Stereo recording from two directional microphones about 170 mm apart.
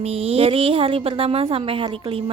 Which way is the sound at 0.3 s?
35° right (ahead or behind).